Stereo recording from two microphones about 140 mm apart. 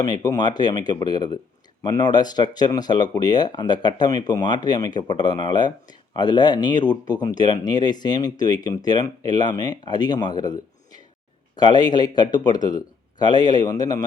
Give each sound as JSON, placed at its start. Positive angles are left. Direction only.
{"t": 0.0, "sound": "speech", "side_deg": 30}